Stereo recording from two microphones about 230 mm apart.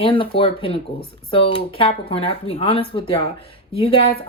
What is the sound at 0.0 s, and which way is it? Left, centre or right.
Speech, left.